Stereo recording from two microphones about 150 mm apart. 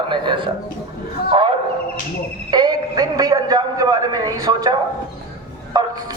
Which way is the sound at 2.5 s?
30° right (ahead or behind).